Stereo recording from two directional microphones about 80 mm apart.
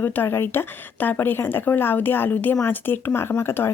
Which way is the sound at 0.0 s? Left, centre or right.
Left.